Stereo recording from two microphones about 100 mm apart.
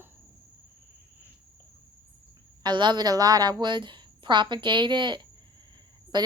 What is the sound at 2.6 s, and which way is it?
A woman's voice, 50° right (ahead or behind).